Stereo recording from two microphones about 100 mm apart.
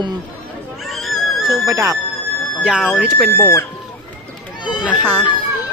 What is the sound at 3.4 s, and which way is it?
Speech, 30° left (ahead or behind).